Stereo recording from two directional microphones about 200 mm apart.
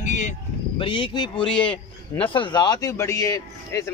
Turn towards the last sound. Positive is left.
turn(degrees=15)  # may be behind; listen again after turning